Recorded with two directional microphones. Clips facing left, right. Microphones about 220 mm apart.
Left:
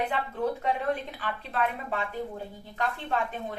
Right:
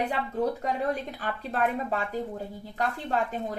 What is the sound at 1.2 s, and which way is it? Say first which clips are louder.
A woman's voice: right 2 dB; 40° right (ahead or behind).